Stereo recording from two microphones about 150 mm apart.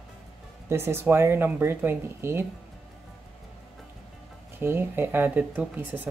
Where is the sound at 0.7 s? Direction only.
15° right (ahead or behind).